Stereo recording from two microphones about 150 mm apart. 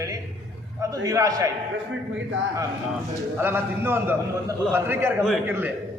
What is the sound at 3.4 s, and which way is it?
A man's voice, 15° right (ahead or behind).